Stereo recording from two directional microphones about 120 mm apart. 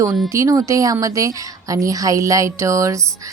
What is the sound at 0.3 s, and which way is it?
A woman's voice, 25° right (ahead or behind).